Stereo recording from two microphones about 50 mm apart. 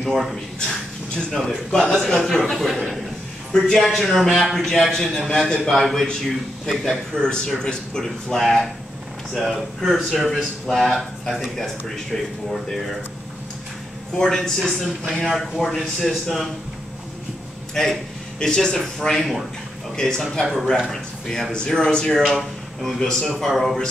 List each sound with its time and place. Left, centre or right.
0.0 s a man's voice: centre
14.1 s a man's voice: centre
17.8 s a man's voice: centre
22.1 s a man's voice: centre